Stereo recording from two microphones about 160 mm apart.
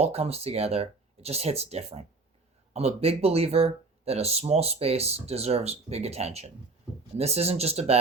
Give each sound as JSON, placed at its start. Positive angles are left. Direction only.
{"t": 0.0, "sound": "speech", "side_deg": -40}